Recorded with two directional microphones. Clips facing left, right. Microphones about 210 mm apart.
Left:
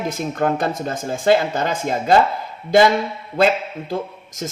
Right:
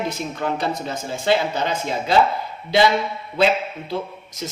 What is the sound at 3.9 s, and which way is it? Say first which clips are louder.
Speech: left 3 dB; 45° left (ahead or behind).